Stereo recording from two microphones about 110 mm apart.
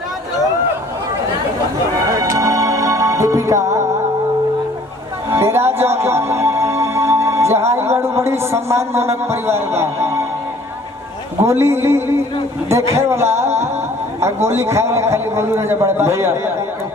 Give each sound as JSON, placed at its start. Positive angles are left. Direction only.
{"t": 2.0, "sound": "music", "side_deg": -30}
{"t": 5.3, "sound": "speech", "side_deg": -25}
{"t": 11.4, "sound": "a man's voice", "side_deg": -25}